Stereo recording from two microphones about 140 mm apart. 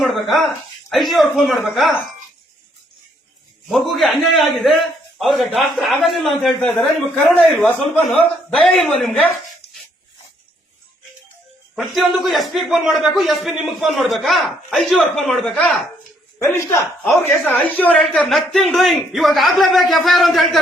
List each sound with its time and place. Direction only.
0.0 s speech: centre (ahead or behind)
3.7 s speech: centre (ahead or behind)
11.7 s speech: centre (ahead or behind)
16.4 s a man's voice: 20° left (ahead or behind); by 20.6 s centre (ahead or behind)